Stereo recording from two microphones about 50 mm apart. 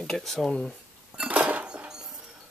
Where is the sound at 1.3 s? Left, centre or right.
Right.